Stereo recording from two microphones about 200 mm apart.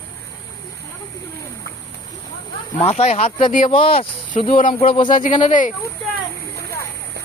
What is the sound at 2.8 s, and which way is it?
Speech, 30° left (ahead or behind).